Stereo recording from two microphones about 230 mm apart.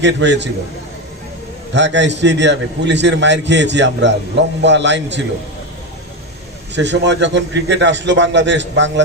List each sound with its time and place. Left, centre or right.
0.0 s a man's voice: right
1.7 s a man's voice: right
6.7 s a man's voice: right